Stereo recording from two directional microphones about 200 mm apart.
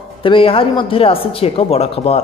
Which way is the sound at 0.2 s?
25° left (ahead or behind).